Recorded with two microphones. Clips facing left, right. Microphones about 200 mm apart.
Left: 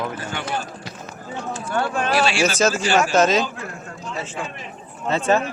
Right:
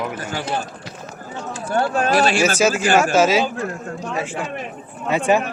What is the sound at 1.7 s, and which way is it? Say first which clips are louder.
Speech: right 4 dB; 40° right (ahead or behind).